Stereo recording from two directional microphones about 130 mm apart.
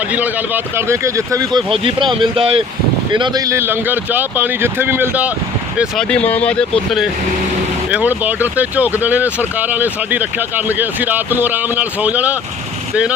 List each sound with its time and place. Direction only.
0.1 s speech: 15° right (ahead or behind)
1.7 s speech: 40° right (ahead or behind); by 5.3 s 15° right (ahead or behind)
6.0 s speech: 10° left (ahead or behind)
7.9 s speech: 10° right (ahead or behind)